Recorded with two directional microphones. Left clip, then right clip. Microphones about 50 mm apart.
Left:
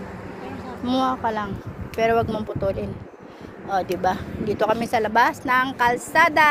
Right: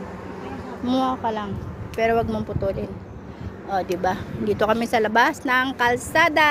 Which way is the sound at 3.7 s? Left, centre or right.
Right.